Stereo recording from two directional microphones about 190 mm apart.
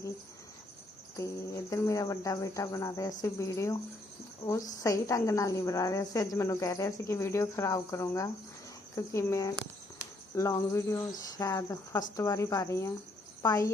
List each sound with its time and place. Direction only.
1.2 s a woman's voice: 15° left (ahead or behind)